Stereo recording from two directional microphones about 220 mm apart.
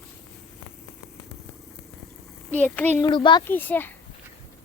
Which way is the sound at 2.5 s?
5° left (ahead or behind).